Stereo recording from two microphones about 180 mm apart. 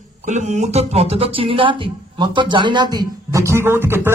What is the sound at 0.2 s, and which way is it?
Speech, 40° right (ahead or behind).